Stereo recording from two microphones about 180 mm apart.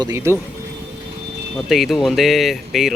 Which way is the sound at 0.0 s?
15° right (ahead or behind).